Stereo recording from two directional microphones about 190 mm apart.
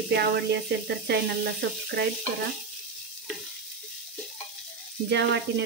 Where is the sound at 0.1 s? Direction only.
60° right (ahead or behind).